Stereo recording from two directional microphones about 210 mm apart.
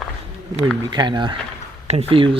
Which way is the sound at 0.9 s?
20° right (ahead or behind).